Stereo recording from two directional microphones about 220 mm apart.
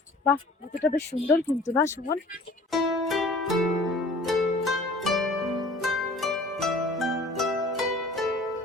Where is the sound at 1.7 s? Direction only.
10° left (ahead or behind).